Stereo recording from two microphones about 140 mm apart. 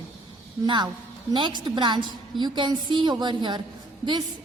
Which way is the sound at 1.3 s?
35° right (ahead or behind).